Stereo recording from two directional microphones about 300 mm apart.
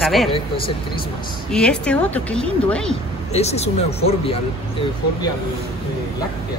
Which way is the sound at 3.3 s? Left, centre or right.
Left.